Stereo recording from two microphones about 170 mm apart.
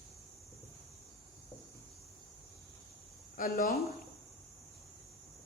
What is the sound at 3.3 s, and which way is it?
Speech, 55° left (ahead or behind).